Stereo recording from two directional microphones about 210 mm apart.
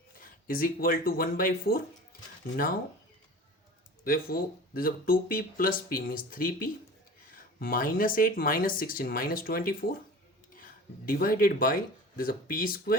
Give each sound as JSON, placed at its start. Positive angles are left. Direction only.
{"t": 0.2, "sound": "speech", "side_deg": 45}
{"t": 4.0, "sound": "speech", "side_deg": 45}